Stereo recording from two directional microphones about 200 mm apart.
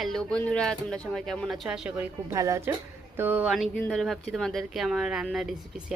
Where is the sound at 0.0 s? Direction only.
Centre (ahead or behind).